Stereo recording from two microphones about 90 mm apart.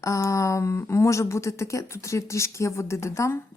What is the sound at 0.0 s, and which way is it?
Speech, 35° left (ahead or behind).